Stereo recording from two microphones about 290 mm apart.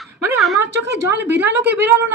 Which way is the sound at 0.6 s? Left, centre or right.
Right.